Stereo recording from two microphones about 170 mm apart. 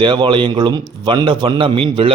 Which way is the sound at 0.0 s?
25° right (ahead or behind).